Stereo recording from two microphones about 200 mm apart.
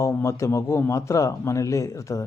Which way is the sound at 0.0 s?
15° left (ahead or behind).